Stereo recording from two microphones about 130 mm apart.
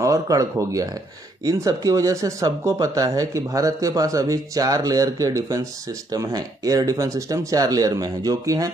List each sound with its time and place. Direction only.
0.0 s speech: 25° right (ahead or behind)